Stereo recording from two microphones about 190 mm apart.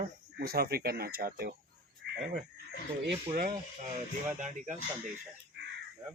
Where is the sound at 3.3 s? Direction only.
45° right (ahead or behind).